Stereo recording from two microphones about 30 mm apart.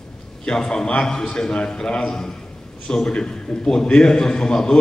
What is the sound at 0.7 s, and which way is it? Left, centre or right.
A man's voice, left.